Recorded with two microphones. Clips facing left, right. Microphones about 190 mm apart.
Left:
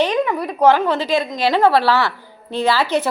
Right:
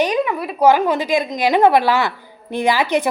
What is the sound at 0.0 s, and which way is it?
A woman's voice, 10° right (ahead or behind).